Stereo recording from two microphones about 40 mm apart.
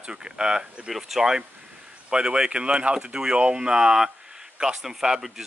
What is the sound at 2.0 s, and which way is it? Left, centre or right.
Speech, right.